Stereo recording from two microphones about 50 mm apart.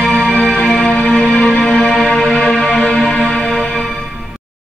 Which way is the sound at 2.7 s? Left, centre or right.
Left.